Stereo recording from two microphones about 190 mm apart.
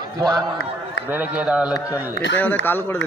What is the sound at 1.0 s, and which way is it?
Speech, 10° right (ahead or behind).